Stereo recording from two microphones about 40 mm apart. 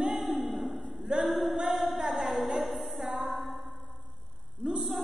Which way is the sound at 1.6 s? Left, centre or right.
Centre.